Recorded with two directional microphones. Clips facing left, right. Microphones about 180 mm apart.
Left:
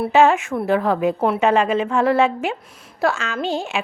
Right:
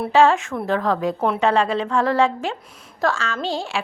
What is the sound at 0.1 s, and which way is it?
A woman's voice, 15° left (ahead or behind).